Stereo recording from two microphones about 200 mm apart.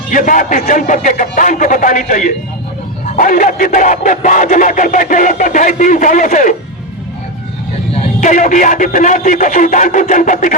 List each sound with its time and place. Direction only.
0.1 s speech: 40° left (ahead or behind)
7.9 s speech: 40° left (ahead or behind)